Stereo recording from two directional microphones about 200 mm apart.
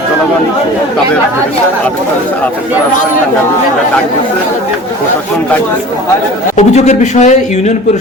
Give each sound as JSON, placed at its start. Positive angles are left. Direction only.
{"t": 6.6, "sound": "speech", "side_deg": 35}